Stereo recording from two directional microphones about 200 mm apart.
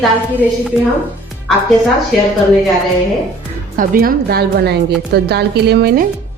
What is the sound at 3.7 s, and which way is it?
A woman's voice, 45° right (ahead or behind).